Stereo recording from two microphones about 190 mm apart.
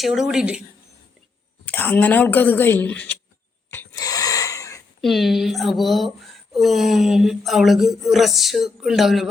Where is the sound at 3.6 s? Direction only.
15° left (ahead or behind).